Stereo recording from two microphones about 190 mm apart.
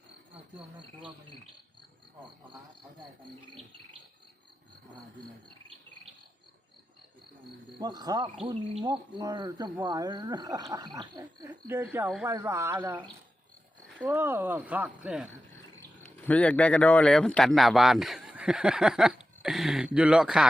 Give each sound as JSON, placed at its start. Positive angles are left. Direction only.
{"t": 7.8, "sound": "cricket", "side_deg": -20}
{"t": 14.0, "sound": "speech", "side_deg": -10}
{"t": 16.0, "sound": "speech", "side_deg": 5}